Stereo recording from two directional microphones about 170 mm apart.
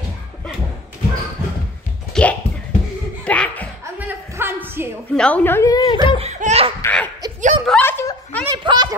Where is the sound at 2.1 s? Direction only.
5° left (ahead or behind).